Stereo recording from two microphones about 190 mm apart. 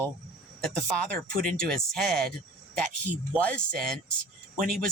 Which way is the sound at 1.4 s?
5° left (ahead or behind).